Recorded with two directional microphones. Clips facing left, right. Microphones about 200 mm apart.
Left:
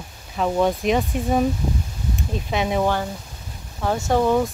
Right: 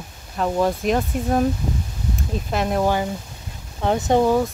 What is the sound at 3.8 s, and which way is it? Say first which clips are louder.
Speech: right 2 dB; 20° right (ahead or behind).